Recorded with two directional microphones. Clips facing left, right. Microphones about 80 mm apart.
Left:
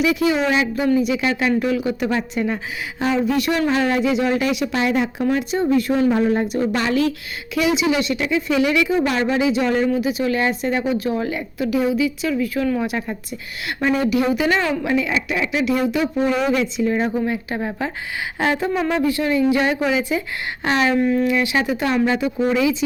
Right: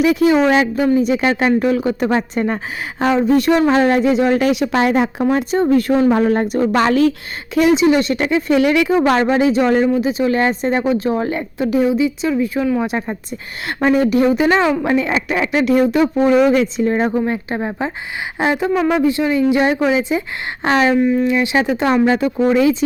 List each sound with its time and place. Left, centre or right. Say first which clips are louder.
0.0 s speech: right 5 dB; right
5.2 s speech: right 4 dB; right
6.1 s speech: right 3 dB; right
9.0 s speech: right 6 dB; right
9.2 s speech: right 4 dB; right
13.8 s speech: right 5 dB; right
20.7 s speech: right 4 dB; right
20.9 s speech: right 3 dB; centre
21.2 s speech: right 3 dB; right
22.0 s speech: right 4 dB; right